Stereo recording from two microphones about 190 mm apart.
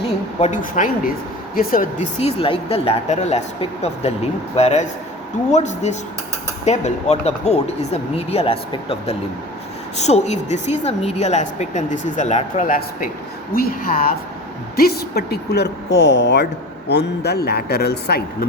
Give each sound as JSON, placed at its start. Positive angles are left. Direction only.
{"t": 0.3, "sound": "speech", "side_deg": 35}